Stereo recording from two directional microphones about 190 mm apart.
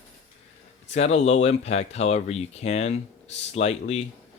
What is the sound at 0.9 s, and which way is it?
Speech, 35° left (ahead or behind).